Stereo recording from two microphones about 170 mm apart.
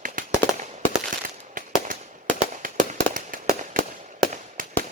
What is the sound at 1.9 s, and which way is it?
Firecracker, 55° right (ahead or behind).